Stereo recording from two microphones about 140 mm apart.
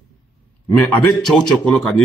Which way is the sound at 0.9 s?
10° left (ahead or behind).